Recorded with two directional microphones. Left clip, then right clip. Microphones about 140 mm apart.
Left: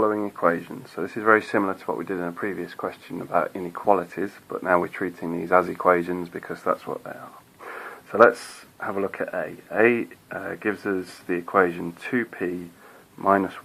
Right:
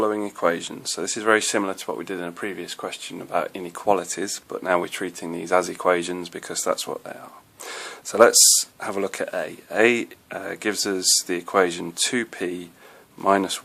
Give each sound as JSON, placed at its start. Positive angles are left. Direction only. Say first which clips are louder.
{"t": 0.0, "sound": "speech", "louder": "even", "side_deg": -45}
{"t": 1.7, "sound": "speech", "louder": "left 1 dB", "side_deg": -35}
{"t": 7.7, "sound": "a sound", "louder": "right 1 dB", "side_deg": -55}
{"t": 8.8, "sound": "speech", "louder": "right 1 dB", "side_deg": -60}